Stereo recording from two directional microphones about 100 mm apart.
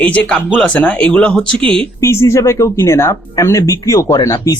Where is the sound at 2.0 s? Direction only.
30° left (ahead or behind).